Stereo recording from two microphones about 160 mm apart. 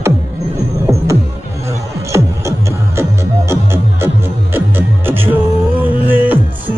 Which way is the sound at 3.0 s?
15° right (ahead or behind).